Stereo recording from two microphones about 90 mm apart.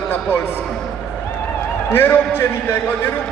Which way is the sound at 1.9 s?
25° left (ahead or behind).